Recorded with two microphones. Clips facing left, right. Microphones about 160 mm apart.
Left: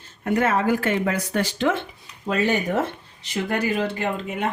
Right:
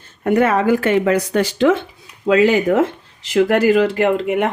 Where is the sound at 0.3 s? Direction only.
65° right (ahead or behind).